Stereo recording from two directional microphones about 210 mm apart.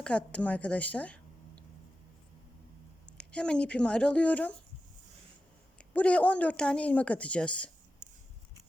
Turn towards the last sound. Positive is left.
turn(degrees=5)  # may be behind; listen again after turning